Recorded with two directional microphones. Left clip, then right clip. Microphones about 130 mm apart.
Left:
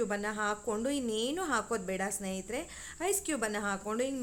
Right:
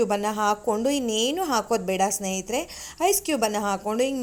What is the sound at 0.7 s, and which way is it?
A woman's voice, 25° right (ahead or behind).